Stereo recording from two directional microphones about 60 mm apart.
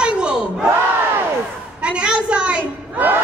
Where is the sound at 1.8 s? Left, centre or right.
Centre.